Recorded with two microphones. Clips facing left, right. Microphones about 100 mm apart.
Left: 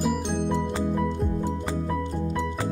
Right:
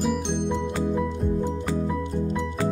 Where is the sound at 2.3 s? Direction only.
15° left (ahead or behind).